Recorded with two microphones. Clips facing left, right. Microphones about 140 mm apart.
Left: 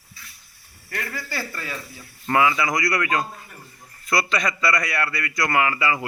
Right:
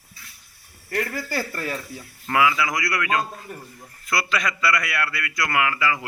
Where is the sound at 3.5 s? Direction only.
45° right (ahead or behind).